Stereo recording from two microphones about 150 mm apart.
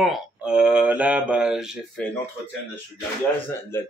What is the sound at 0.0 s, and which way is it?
Speech, 5° right (ahead or behind).